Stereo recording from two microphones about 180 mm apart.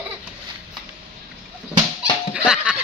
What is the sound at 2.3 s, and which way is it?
Giggle, 5° right (ahead or behind).